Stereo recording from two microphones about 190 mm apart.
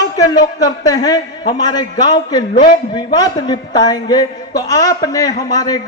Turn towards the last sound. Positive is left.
turn(degrees=20)  # may be behind; listen again after turning